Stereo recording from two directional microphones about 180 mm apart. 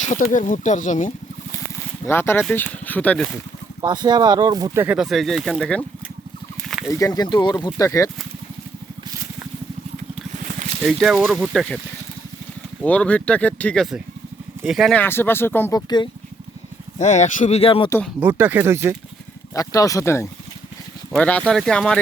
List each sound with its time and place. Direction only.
0.0 s speech: 45° left (ahead or behind)
2.0 s speech: 10° left (ahead or behind)
3.8 s speech: 25° right (ahead or behind); by 5.8 s 5° left (ahead or behind)
6.6 s a sound: centre (ahead or behind)
7.0 s speech: 20° left (ahead or behind)
10.8 s speech: 5° right (ahead or behind)
12.8 s speech: 5° left (ahead or behind)
15.0 s speech: 10° left (ahead or behind)
17.0 s speech: 40° left (ahead or behind)
18.2 s speech: 10° right (ahead or behind)
19.5 s speech: 20° left (ahead or behind)